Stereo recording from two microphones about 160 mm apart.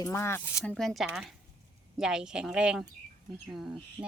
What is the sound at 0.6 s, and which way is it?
Speech, 5° left (ahead or behind).